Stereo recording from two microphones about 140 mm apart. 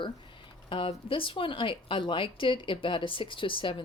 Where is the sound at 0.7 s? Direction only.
40° left (ahead or behind).